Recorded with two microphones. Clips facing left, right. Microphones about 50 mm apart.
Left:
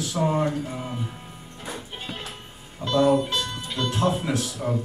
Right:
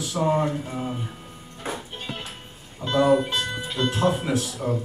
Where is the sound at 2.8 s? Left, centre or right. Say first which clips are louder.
Right 1 dB; right.